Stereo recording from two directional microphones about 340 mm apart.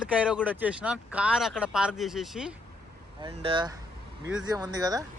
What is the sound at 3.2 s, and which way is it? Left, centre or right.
Speech, centre.